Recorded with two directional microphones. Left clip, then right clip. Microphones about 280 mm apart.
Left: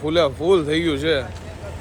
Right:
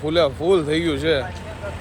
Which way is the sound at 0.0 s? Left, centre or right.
Left.